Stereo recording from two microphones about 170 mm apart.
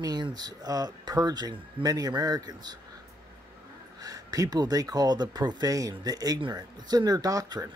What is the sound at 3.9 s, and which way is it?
Speech, 20° right (ahead or behind).